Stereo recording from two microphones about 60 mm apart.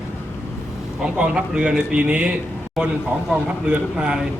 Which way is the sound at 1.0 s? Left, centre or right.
Centre.